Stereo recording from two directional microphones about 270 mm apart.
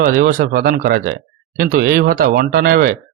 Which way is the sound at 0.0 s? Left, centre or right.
Right.